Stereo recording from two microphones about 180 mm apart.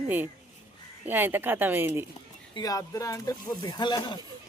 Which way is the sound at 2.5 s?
20° left (ahead or behind).